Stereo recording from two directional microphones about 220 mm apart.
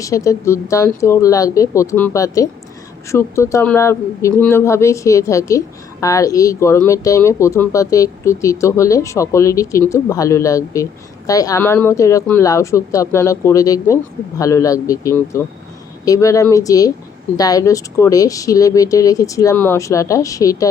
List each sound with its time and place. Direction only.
0.0 s speech: 15° left (ahead or behind)